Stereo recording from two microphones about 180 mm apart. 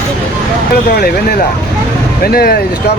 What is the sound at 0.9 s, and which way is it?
Speech, 60° left (ahead or behind).